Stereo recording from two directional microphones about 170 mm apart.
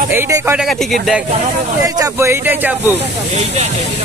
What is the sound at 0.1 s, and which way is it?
Speech, 15° right (ahead or behind).